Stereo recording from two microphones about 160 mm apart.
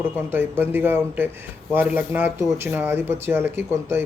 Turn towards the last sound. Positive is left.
turn(degrees=-15)  # may be behind; listen again after turning